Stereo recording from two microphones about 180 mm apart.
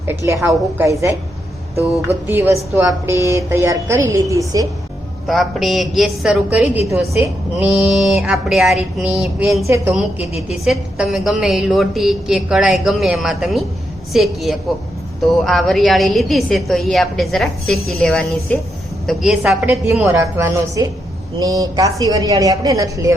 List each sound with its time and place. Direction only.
0.4 s a woman's voice: 15° right (ahead or behind)
2.2 s a woman's voice: 10° right (ahead or behind)
5.2 s a woman's voice: centre (ahead or behind)
9.6 s a woman's voice: 15° right (ahead or behind)
9.9 s a woman's voice: 5° right (ahead or behind)